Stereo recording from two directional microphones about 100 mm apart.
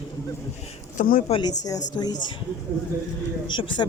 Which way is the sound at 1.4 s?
40° left (ahead or behind).